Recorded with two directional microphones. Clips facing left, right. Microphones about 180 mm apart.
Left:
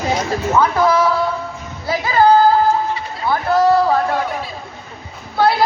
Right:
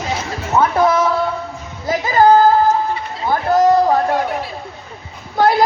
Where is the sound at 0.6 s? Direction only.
25° right (ahead or behind).